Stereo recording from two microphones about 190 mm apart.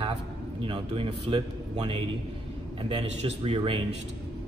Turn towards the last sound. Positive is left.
turn(degrees=-30)  # may be behind; listen again after turning